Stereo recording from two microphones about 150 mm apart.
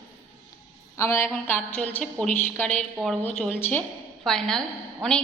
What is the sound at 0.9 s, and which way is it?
A woman's voice, 15° left (ahead or behind).